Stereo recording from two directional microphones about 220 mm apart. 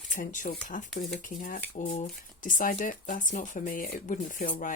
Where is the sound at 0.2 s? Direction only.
35° left (ahead or behind).